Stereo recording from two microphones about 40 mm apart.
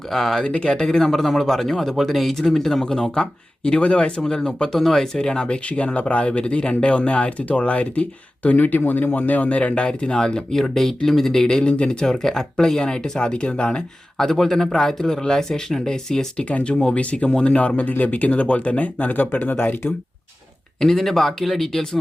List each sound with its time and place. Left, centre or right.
0.1 s speech: centre
0.4 s speech: left
4.2 s speech: centre
5.6 s speech: left
10.5 s speech: centre; by 13.7 s left
13.7 s speech: centre
16.5 s speech: left
19.5 s speech: left
20.8 s speech: centre